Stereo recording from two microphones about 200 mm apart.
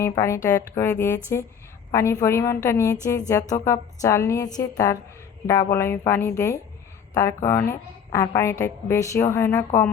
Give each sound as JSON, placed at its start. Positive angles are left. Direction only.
{"t": 0.0, "sound": "a woman's voice", "side_deg": 15}